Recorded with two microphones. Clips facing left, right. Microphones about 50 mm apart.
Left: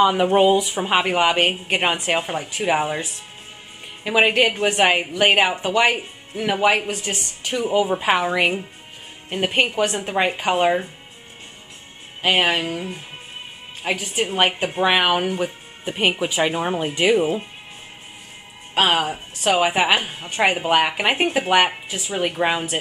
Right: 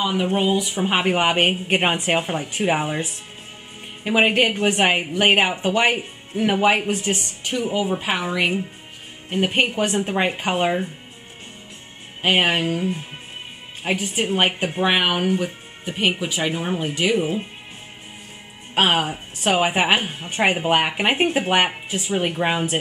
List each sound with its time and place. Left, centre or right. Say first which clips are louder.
0.0 s speech: left 6 dB; left
0.7 s speech: right 1 dB; centre
1.1 s a woman's voice: left 1 dB; centre
2.1 s speech: right 1 dB; centre
4.0 s a woman's voice: left 1 dB; centre
7.6 s speech: left 4 dB; centre
7.9 s speech: left 4 dB; left
9.3 s speech: even; centre
12.2 s a woman's voice: even; centre
12.6 s speech: right 4 dB; centre
14.1 s speech: left 2 dB; centre
15.2 s speech: right 1 dB; centre
18.8 s a woman's voice: even; centre
20.3 s a woman's voice: left 1 dB; centre